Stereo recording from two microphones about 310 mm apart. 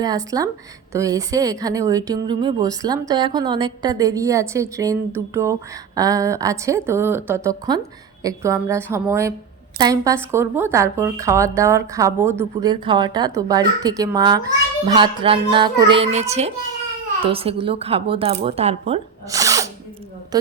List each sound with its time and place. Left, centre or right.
0.0 s speech: centre